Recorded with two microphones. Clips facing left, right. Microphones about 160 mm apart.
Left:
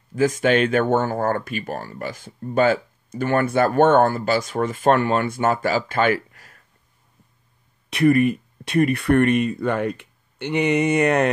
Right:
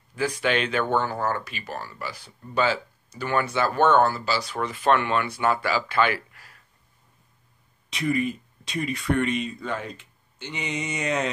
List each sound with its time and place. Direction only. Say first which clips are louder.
0.1 s speech: left 7 dB; 45° left (ahead or behind)
7.9 s speech: left 9 dB; 60° left (ahead or behind)